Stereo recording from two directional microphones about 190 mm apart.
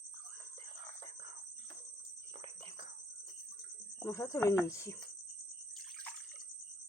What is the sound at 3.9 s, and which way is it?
Speech, 15° left (ahead or behind).